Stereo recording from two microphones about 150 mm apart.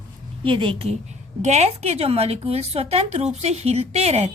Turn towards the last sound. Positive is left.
turn(degrees=-45)  # may be behind; listen again after turning